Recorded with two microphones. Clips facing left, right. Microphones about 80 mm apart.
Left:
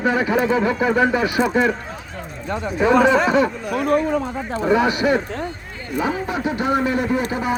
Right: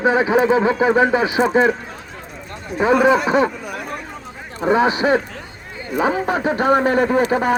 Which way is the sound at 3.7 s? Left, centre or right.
Left.